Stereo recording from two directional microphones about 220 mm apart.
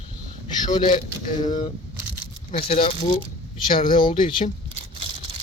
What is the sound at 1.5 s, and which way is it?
Speech, 20° left (ahead or behind).